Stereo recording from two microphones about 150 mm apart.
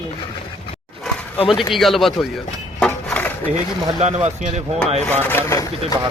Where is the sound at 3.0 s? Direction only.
10° left (ahead or behind).